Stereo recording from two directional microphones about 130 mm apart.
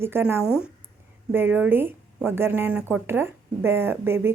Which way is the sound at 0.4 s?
5° right (ahead or behind).